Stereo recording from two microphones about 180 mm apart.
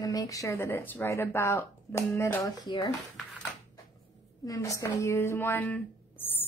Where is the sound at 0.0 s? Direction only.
20° left (ahead or behind).